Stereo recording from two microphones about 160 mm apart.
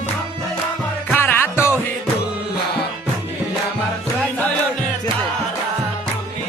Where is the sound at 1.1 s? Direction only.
15° left (ahead or behind).